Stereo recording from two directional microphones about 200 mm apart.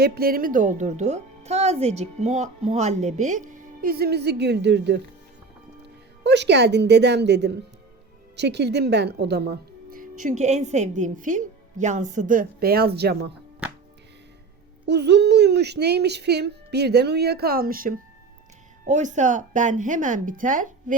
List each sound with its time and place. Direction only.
0.0 s a woman's voice: 50° right (ahead or behind)
6.2 s a child's voice: 60° right (ahead or behind)
14.8 s a child's voice: 55° right (ahead or behind); by 20.9 s 40° right (ahead or behind)